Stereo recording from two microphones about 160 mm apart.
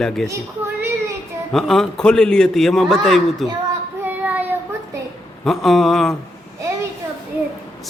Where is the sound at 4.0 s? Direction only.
10° right (ahead or behind).